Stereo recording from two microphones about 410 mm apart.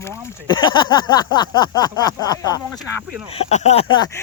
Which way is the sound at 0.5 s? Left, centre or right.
Centre.